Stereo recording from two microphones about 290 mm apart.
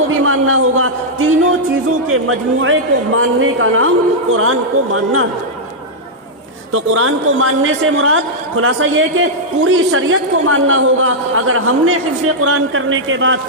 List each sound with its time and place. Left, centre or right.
0.1 s a sound: right
2.1 s a man's voice: right
6.7 s a man's voice: right